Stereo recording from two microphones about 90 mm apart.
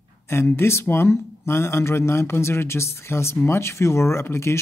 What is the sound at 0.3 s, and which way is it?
Speech, 30° left (ahead or behind).